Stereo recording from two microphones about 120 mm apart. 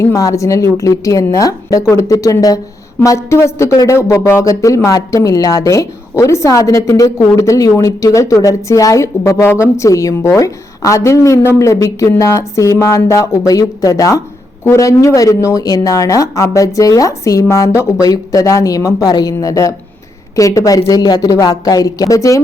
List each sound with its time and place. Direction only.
0.0 s speech: 25° left (ahead or behind)